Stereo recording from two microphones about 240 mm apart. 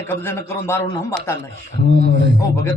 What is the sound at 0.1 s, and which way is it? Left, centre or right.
A man's voice, centre.